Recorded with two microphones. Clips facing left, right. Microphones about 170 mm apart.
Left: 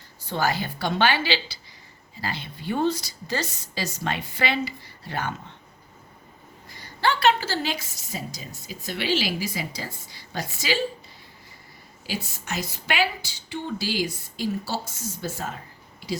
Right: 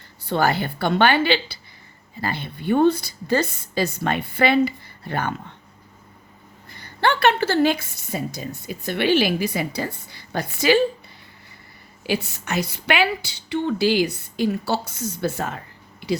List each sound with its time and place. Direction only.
0.2 s a woman's voice: 60° right (ahead or behind)
6.7 s a woman's voice: 60° right (ahead or behind)
12.0 s a woman's voice: 65° right (ahead or behind)